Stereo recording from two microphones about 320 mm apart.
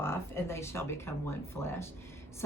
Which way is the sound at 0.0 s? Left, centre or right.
Centre.